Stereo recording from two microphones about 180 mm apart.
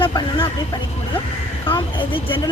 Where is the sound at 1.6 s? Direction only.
30° left (ahead or behind).